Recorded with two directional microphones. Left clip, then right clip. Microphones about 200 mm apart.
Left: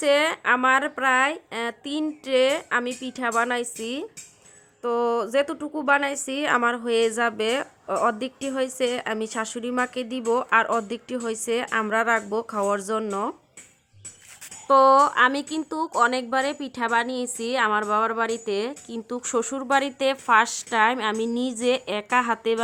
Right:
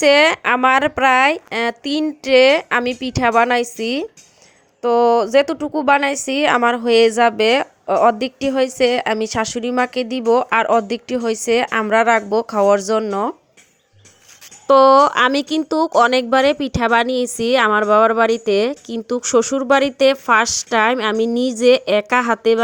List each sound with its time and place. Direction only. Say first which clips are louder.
0.0 s a woman's voice: right 9 dB; 30° right (ahead or behind)
14.7 s a woman's voice: right 6 dB; 30° right (ahead or behind)